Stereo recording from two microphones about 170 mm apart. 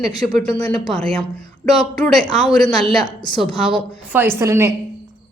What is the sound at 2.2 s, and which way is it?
A woman's voice, 25° left (ahead or behind).